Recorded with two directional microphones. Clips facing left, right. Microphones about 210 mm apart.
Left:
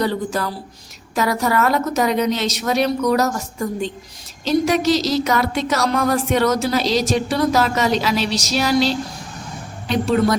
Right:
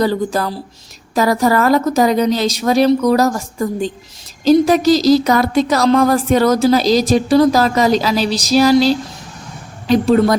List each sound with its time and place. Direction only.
0.0 s speech: 35° right (ahead or behind)
4.4 s a woman's voice: 35° right (ahead or behind)